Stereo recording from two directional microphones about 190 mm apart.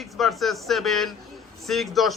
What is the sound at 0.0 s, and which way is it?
Speech, centre (ahead or behind).